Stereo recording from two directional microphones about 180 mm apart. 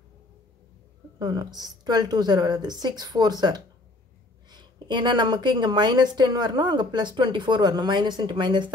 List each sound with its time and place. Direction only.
1.2 s a woman's voice: 25° right (ahead or behind)